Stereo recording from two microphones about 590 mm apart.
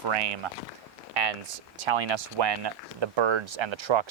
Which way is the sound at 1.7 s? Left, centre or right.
Right.